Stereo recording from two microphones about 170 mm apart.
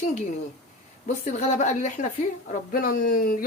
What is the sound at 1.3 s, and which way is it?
Speech, 45° left (ahead or behind).